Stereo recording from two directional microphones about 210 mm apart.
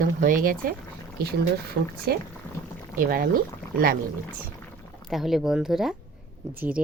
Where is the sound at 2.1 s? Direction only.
45° right (ahead or behind).